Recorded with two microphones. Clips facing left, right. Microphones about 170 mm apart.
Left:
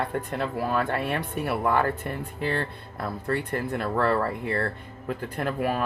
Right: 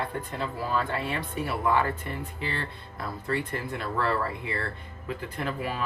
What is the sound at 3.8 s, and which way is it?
Speech, 55° left (ahead or behind).